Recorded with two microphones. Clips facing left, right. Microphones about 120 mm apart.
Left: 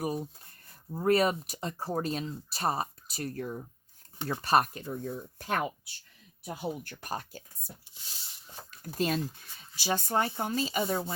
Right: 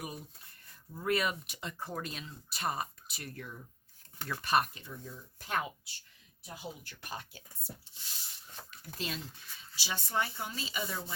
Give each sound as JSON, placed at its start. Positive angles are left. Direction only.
{"t": 0.0, "sound": "speech", "side_deg": 35}
{"t": 9.0, "sound": "speech", "side_deg": 45}